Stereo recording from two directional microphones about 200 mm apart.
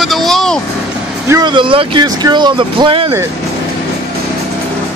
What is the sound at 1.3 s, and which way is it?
Speech, 25° right (ahead or behind).